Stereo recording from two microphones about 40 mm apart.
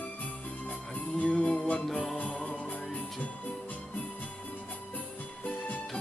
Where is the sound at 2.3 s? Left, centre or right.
Centre.